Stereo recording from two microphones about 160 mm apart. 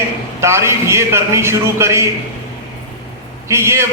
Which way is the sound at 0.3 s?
15° right (ahead or behind).